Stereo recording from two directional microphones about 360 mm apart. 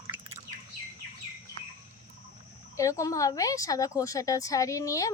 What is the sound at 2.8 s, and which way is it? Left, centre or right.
Speech, centre.